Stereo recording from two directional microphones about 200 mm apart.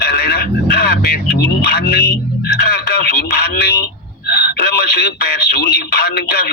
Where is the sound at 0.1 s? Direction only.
50° left (ahead or behind).